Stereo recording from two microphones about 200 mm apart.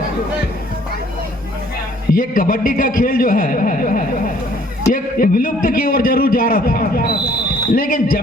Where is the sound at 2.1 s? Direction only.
45° left (ahead or behind).